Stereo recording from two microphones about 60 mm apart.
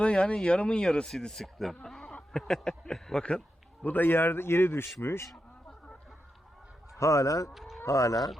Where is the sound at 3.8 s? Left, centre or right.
Left.